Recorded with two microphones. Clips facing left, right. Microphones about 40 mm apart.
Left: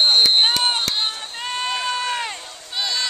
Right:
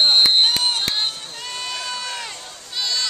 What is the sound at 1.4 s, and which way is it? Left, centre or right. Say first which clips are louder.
Sheep: left 6 dB; left.